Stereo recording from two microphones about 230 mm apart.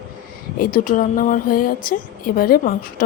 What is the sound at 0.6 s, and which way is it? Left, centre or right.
A woman's voice, left.